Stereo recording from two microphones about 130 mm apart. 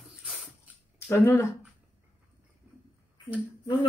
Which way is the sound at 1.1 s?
20° left (ahead or behind).